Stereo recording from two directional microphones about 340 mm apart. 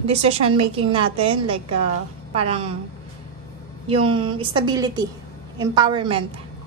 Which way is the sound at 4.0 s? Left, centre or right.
Centre.